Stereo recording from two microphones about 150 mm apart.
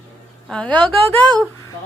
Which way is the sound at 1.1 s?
5° left (ahead or behind).